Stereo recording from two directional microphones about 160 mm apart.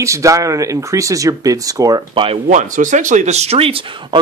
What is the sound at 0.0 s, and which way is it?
Speech, 20° right (ahead or behind).